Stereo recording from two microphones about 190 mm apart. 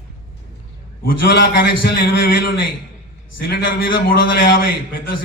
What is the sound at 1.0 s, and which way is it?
A man's voice, 55° left (ahead or behind).